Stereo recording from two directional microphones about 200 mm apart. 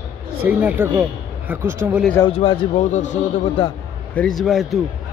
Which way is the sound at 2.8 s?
35° left (ahead or behind).